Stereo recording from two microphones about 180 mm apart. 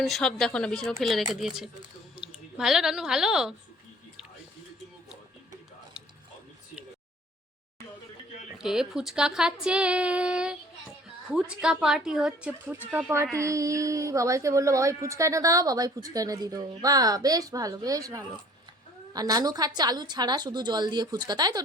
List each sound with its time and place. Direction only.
0.0 s speech: centre (ahead or behind)
8.5 s speech: 5° right (ahead or behind); by 21.6 s 20° right (ahead or behind)